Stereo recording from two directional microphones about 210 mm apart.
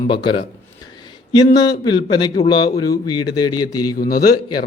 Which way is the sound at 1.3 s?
20° left (ahead or behind).